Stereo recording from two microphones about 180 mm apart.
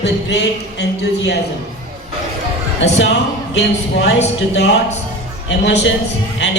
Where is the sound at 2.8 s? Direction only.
75° left (ahead or behind).